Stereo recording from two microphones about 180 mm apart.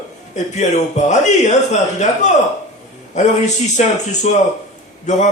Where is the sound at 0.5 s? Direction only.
40° left (ahead or behind).